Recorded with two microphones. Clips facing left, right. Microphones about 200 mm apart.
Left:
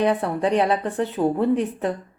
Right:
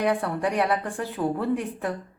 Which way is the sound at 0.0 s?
25° left (ahead or behind).